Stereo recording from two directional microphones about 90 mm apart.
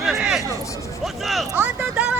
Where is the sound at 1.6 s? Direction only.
15° right (ahead or behind).